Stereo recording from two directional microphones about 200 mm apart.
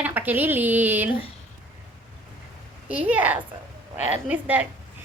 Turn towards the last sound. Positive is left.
turn(degrees=-10)  # may be behind; listen again after turning